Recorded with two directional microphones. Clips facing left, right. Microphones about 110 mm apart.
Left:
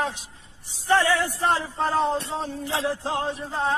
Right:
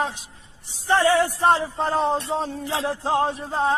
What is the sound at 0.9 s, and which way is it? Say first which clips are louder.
Speech: right 3 dB; 20° right (ahead or behind).